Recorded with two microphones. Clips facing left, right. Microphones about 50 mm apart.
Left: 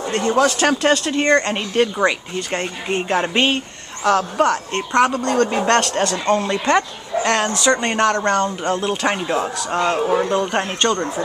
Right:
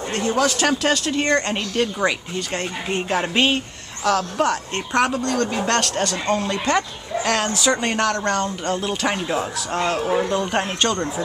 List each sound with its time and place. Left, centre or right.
0.1 s speech: centre
1.6 s a man's voice: centre
2.0 s speech: centre
5.7 s a man's voice: left
6.1 s speech: centre
8.1 s a man's voice: left
8.8 s speech: centre